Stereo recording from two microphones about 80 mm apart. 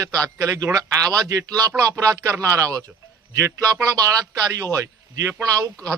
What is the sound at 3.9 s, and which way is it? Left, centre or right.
A man's voice, right.